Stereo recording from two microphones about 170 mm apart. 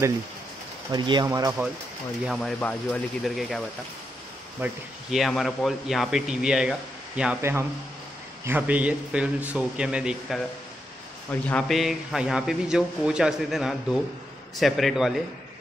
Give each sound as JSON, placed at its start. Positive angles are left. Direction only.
{"t": 0.9, "sound": "speech", "side_deg": -25}
{"t": 2.2, "sound": "a man's voice", "side_deg": 0}
{"t": 11.4, "sound": "a man's voice", "side_deg": 5}